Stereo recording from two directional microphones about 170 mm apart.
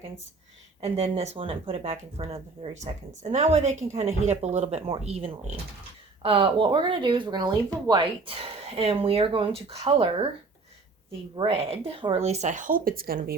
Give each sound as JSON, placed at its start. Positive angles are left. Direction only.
{"t": 0.8, "sound": "speech", "side_deg": -35}
{"t": 11.3, "sound": "speech", "side_deg": -35}